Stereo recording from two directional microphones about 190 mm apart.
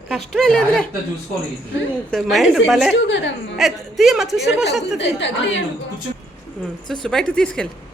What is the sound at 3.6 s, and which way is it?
A woman's voice, centre (ahead or behind).